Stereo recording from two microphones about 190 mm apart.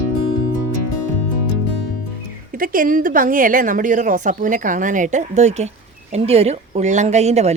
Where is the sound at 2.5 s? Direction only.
45° right (ahead or behind).